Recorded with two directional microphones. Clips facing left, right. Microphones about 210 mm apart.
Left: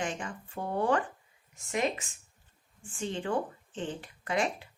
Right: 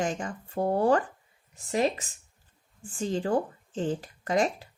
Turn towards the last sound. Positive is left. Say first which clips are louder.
# right 5 dB
turn(degrees=-40)  # may be behind; listen again after turning